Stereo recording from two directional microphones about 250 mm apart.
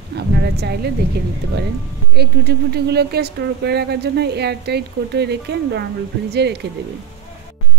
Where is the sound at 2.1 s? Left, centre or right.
Right.